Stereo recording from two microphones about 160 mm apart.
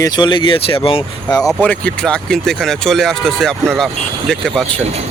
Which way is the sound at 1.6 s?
5° left (ahead or behind).